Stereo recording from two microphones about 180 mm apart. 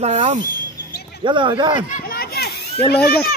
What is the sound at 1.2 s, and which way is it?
Speech, 25° right (ahead or behind).